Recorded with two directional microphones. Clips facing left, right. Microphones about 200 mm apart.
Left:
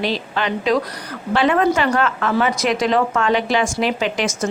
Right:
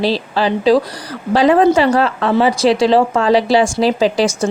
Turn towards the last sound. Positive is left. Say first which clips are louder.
# right 7 dB
turn(degrees=-35)  # may be behind; listen again after turning